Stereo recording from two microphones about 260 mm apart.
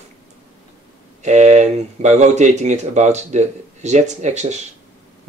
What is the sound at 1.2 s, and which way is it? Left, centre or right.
Speech, right.